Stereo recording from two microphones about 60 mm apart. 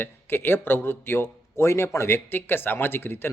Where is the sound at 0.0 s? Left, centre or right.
Left.